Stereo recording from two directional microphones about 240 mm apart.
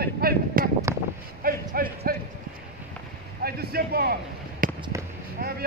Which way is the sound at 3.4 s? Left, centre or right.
Right.